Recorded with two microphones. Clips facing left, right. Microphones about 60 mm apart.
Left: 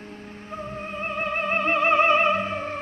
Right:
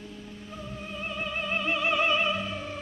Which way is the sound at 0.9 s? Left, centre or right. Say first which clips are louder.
Left 6 dB; left.